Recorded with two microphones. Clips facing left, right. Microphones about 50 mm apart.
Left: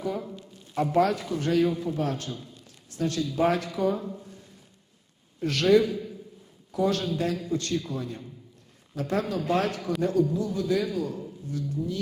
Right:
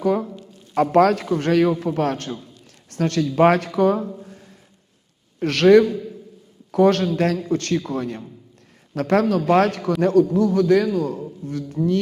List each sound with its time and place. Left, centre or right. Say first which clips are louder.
0.0 s a sound: right 11 dB; right
0.7 s a man's voice: right 8 dB; right
4.2 s a sound: right 6 dB; right
5.4 s a man's voice: right 8 dB; right
10.8 s a man's voice: right 8 dB; right
11.4 s a man's voice: right 8 dB; right